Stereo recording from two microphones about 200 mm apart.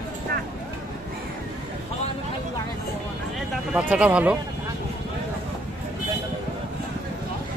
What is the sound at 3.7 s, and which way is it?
Speech, 5° right (ahead or behind).